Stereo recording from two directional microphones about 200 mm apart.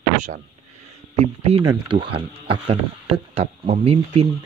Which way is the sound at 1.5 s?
25° right (ahead or behind).